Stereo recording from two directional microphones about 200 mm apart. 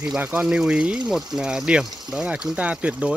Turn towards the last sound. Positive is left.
turn(degrees=-5)  # may be behind; listen again after turning